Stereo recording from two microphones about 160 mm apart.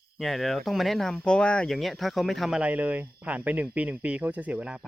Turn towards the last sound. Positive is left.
turn(degrees=-5)  # may be behind; listen again after turning